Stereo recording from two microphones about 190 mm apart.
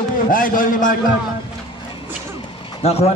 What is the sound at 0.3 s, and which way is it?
Speech, 45° left (ahead or behind).